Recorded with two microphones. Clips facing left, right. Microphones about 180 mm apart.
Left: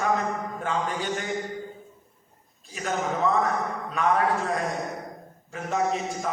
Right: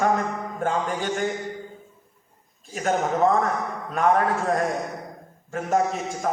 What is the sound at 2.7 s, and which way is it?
Speech, 50° right (ahead or behind).